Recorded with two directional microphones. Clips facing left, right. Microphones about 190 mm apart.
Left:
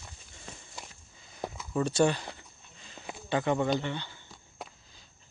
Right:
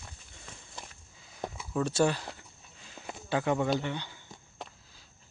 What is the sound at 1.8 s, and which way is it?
Speech, centre (ahead or behind).